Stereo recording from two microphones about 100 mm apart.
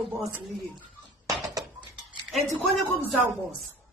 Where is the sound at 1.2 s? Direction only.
35° right (ahead or behind).